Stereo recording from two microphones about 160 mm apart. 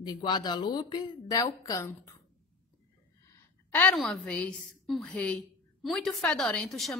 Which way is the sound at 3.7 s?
10° left (ahead or behind).